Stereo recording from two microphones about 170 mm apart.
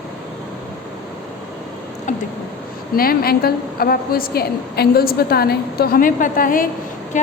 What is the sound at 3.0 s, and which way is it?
A woman's voice, 60° left (ahead or behind).